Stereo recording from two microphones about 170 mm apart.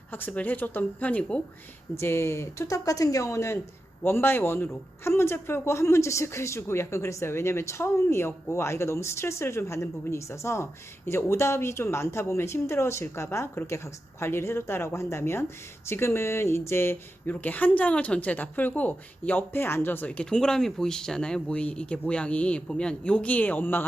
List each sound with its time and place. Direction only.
0.1 s speech: 10° left (ahead or behind)